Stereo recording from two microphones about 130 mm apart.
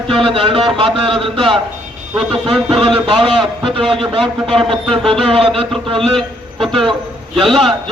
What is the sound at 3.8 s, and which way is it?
A man's voice, centre (ahead or behind).